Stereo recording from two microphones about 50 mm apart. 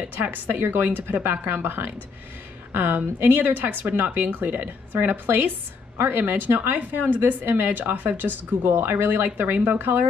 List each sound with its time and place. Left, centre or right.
0.2 s speech: right
0.8 s speech: right